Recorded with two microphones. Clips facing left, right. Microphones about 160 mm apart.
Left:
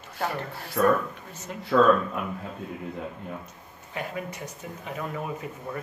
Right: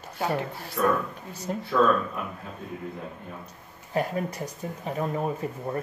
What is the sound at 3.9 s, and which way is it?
Speech, 40° right (ahead or behind).